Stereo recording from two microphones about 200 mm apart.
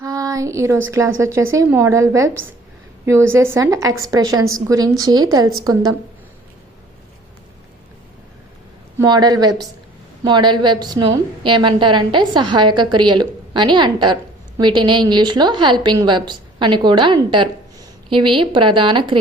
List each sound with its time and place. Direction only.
0.0 s a sound: 15° right (ahead or behind)
0.9 s a woman's voice: 15° right (ahead or behind)
9.0 s a woman's voice: 20° right (ahead or behind)